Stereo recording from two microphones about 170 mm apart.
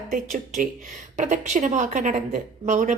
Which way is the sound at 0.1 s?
55° right (ahead or behind).